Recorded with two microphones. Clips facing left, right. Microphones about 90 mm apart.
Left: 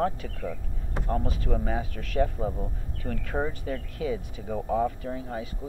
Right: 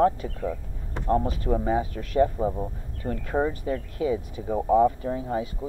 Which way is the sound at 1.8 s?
5° right (ahead or behind).